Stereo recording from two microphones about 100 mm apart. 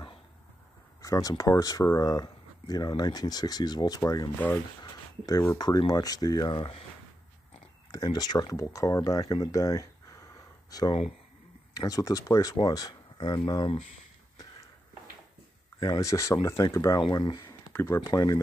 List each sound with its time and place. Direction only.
1.0 s speech: 35° left (ahead or behind)
7.9 s speech: 40° left (ahead or behind)
15.8 s speech: 35° left (ahead or behind)
17.1 s speech: 45° left (ahead or behind)
17.7 s speech: 30° left (ahead or behind)